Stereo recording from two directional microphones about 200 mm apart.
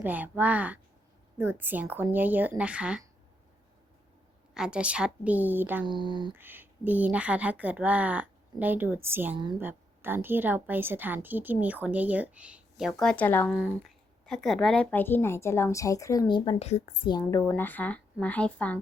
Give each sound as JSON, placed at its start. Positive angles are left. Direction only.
{"t": 0.0, "sound": "a woman's voice", "side_deg": -10}
{"t": 4.5, "sound": "a woman's voice", "side_deg": -5}
{"t": 5.8, "sound": "speech", "side_deg": -25}
{"t": 6.3, "sound": "a woman's voice", "side_deg": -10}
{"t": 9.3, "sound": "speech", "side_deg": -20}
{"t": 9.6, "sound": "a woman's voice", "side_deg": -10}
{"t": 13.5, "sound": "speech", "side_deg": 0}
{"t": 17.4, "sound": "speech", "side_deg": 10}